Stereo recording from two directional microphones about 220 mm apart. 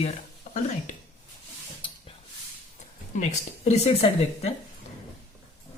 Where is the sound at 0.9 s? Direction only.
35° left (ahead or behind).